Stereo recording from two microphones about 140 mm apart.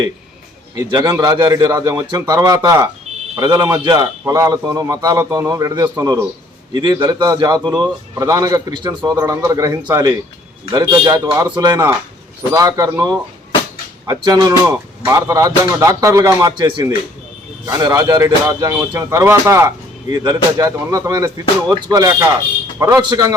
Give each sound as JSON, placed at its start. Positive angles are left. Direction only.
{"t": 0.8, "sound": "a man's voice", "side_deg": -25}
{"t": 14.7, "sound": "a man's voice", "side_deg": -15}